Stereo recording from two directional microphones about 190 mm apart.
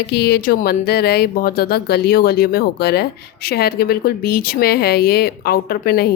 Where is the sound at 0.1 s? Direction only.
55° left (ahead or behind).